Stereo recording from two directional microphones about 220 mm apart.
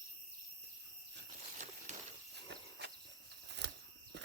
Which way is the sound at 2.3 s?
50° right (ahead or behind).